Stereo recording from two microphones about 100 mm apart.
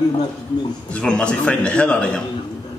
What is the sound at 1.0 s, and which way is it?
A man's voice, 10° left (ahead or behind).